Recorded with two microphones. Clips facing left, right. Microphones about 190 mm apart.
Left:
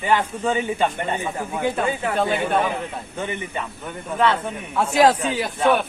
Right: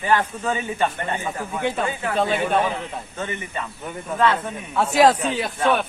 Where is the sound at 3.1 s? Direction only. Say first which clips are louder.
Left 2 dB; 15° left (ahead or behind).